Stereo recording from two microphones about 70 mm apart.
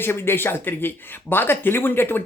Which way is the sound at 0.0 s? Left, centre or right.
Left.